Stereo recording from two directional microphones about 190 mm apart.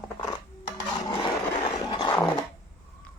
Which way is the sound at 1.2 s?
20° left (ahead or behind).